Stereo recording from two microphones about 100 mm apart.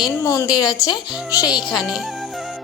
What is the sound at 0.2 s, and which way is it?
A child's voice, 35° left (ahead or behind).